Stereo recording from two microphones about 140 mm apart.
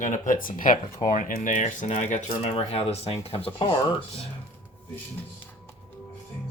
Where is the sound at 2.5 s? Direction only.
45° left (ahead or behind).